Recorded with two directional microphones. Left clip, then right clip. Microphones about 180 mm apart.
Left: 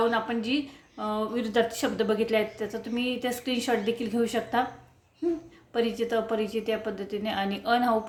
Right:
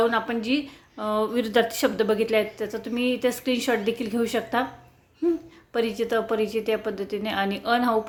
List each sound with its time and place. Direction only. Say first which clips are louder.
0.1 s a woman's voice: right 3 dB; 25° right (ahead or behind)
5.7 s a woman's voice: right 2 dB; 25° right (ahead or behind)